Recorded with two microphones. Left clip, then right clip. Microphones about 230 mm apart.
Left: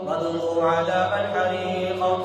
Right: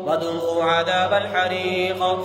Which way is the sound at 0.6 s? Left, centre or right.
Right.